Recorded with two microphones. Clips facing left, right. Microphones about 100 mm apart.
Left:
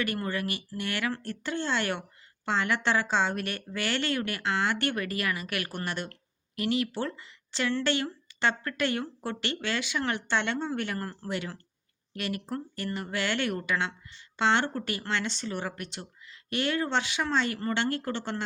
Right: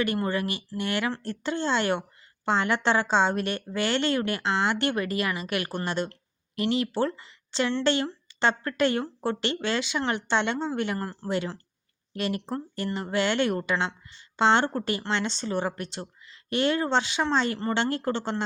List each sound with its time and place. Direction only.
0.0 s speech: 25° right (ahead or behind)